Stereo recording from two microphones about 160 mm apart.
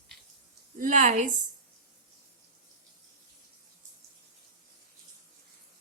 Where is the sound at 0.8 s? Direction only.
55° right (ahead or behind).